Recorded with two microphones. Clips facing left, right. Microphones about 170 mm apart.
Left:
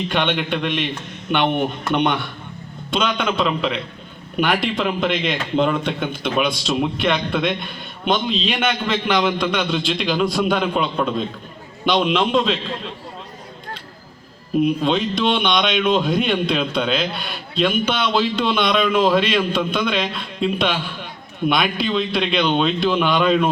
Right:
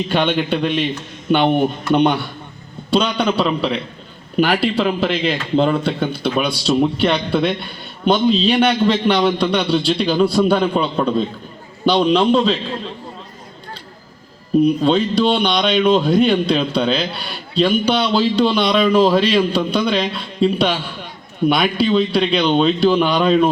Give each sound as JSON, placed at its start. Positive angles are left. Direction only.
{"t": 0.1, "sound": "a man's voice", "side_deg": -40}
{"t": 14.6, "sound": "a man's voice", "side_deg": -40}